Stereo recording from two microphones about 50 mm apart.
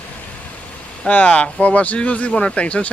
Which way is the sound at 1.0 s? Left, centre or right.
Left.